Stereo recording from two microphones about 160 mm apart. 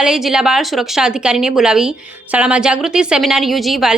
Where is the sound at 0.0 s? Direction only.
5° right (ahead or behind).